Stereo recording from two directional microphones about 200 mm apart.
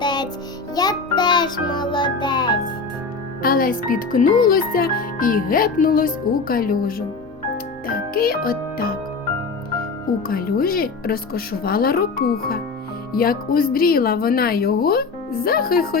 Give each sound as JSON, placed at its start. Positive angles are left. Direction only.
{"t": 0.0, "sound": "music", "side_deg": 20}
{"t": 3.4, "sound": "speech", "side_deg": 45}
{"t": 7.5, "sound": "music", "side_deg": 45}
{"t": 10.2, "sound": "speech", "side_deg": 45}